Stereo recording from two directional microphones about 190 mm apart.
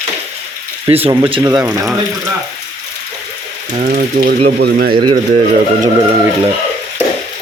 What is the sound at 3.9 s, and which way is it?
Speech, 50° right (ahead or behind).